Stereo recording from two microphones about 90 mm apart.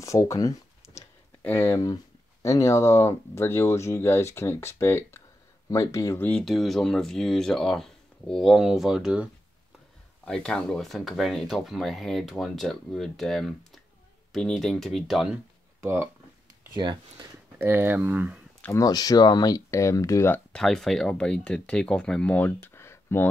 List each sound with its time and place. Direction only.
0.0 s a sound: 35° left (ahead or behind)
1.4 s speech: 25° left (ahead or behind)
6.4 s speech: centre (ahead or behind)
10.2 s speech: 10° left (ahead or behind)
15.8 s speech: 25° right (ahead or behind)
16.7 s speech: 55° right (ahead or behind)
17.6 s speech: 25° right (ahead or behind)
18.8 s speech: 45° left (ahead or behind)
19.7 s speech: 35° left (ahead or behind)
20.5 s speech: 5° left (ahead or behind); by 23.2 s 30° left (ahead or behind)